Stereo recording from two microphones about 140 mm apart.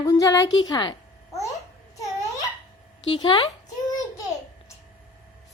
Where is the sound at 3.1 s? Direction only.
40° left (ahead or behind).